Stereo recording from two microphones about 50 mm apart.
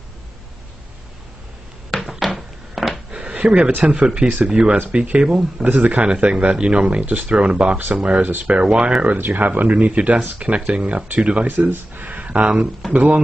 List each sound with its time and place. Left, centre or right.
1.9 s a sound: centre
3.1 s a sound: right
3.8 s speech: right
8.6 s speech: centre
9.0 s speech: right
11.7 s speech: right